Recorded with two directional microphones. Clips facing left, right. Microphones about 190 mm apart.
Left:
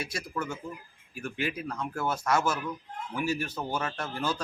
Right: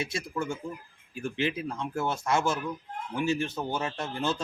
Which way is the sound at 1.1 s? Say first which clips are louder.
Right 3 dB; 25° right (ahead or behind).